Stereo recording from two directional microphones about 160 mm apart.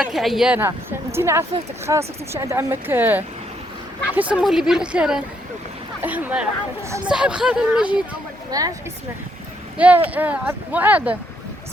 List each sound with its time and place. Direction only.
0.0 s speech: centre (ahead or behind)
8.4 s speech: 25° right (ahead or behind)
9.7 s speech: 10° right (ahead or behind)